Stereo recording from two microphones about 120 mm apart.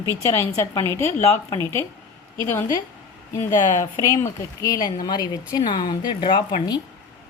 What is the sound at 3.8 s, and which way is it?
Speech, 25° left (ahead or behind).